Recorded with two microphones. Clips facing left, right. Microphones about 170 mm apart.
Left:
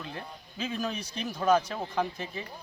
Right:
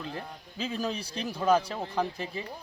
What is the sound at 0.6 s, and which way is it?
Speech, 30° right (ahead or behind).